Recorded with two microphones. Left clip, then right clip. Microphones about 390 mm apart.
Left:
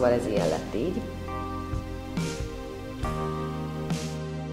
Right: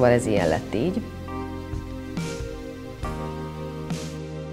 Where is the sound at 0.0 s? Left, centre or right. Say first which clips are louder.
Right 4 dB; right.